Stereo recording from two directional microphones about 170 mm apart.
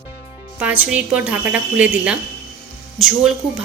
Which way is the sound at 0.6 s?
5° right (ahead or behind).